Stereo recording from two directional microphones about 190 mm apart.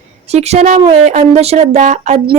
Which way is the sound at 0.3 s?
35° right (ahead or behind).